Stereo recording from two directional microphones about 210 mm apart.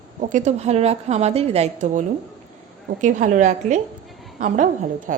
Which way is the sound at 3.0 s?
35° right (ahead or behind).